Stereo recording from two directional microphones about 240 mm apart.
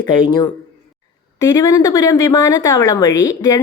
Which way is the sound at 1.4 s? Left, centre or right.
Centre.